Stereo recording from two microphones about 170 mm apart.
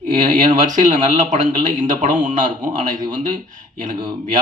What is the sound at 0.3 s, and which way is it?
Speech, 50° right (ahead or behind).